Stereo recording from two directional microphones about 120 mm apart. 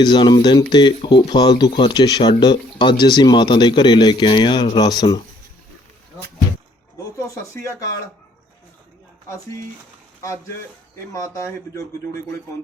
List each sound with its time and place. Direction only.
0.0 s speech: 40° left (ahead or behind)
11.1 s speech: 25° left (ahead or behind)